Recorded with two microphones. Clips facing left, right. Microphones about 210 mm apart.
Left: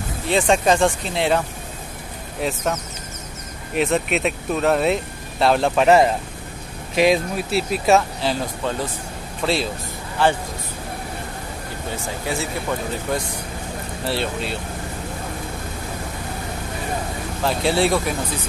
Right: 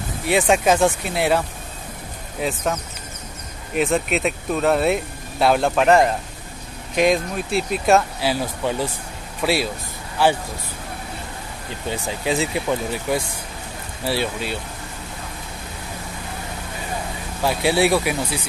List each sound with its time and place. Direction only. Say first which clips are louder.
0.3 s speech: even; 5° right (ahead or behind)
2.4 s speech: even; centre (ahead or behind)
12.3 s speech: right 4 dB; 20° right (ahead or behind)
17.4 s speech: right 1 dB; 5° right (ahead or behind)